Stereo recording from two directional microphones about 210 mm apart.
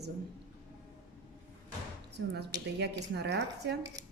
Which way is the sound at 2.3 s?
50° right (ahead or behind).